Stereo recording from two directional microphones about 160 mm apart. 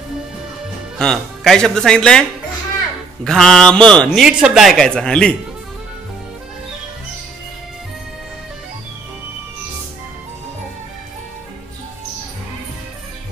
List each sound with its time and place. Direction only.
0.9 s speech: 5° left (ahead or behind)
3.3 s speech: 5° left (ahead or behind)